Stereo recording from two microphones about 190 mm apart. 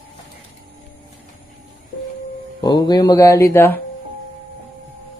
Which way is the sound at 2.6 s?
20° left (ahead or behind).